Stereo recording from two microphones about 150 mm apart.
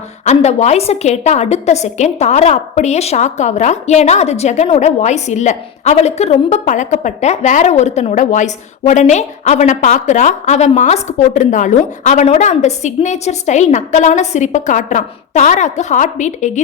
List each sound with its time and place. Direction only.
0.3 s a woman's voice: 50° left (ahead or behind)